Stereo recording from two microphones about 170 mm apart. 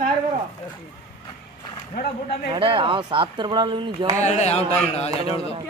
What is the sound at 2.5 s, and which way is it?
Speech, 30° right (ahead or behind).